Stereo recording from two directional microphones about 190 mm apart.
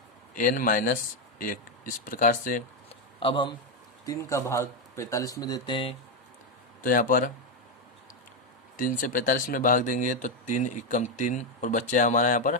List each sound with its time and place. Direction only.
0.3 s speech: 45° left (ahead or behind)
3.2 s speech: 25° left (ahead or behind)
4.0 s speech: 15° left (ahead or behind)
6.8 s speech: 45° left (ahead or behind)
8.7 s speech: 45° left (ahead or behind)